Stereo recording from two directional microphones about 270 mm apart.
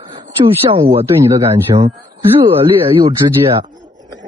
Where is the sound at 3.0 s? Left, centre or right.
Centre.